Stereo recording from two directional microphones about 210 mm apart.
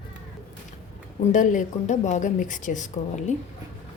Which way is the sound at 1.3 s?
35° left (ahead or behind).